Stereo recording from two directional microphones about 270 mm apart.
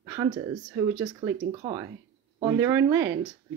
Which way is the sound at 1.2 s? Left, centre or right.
Right.